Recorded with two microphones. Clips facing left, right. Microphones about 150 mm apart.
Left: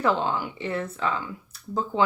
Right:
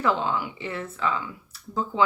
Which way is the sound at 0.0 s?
40° left (ahead or behind).